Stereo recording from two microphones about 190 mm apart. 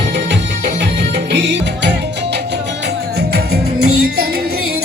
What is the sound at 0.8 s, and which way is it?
Music, 65° right (ahead or behind).